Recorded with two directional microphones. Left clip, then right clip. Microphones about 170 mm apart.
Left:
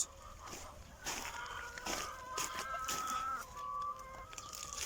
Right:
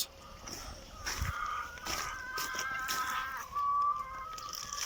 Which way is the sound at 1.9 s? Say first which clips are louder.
Right 2 dB; 15° left (ahead or behind).